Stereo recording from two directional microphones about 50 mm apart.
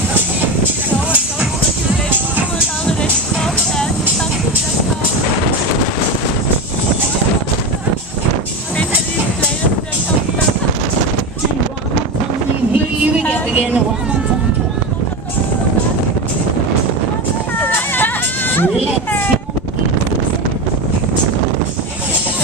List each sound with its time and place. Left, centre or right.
17.6 s hubbub: left